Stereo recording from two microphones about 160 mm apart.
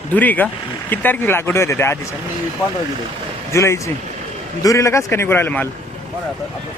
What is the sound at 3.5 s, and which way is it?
Speech, 15° left (ahead or behind).